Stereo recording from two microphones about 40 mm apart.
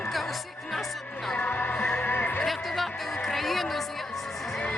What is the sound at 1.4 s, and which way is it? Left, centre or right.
Music, left.